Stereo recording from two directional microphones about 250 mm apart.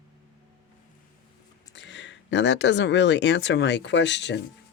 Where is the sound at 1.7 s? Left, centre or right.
Left.